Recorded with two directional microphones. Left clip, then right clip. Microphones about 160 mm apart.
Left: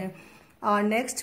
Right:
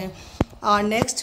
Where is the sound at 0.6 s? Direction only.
Centre (ahead or behind).